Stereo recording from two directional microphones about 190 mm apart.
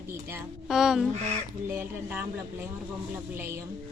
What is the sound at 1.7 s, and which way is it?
Speech, 10° right (ahead or behind).